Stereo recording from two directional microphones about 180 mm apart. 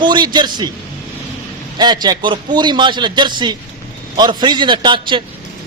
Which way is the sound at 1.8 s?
25° right (ahead or behind).